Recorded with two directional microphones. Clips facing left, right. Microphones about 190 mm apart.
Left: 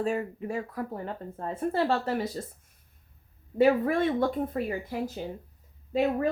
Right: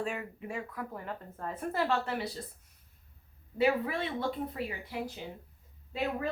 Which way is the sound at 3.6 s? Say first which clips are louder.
Left 7 dB; 50° left (ahead or behind).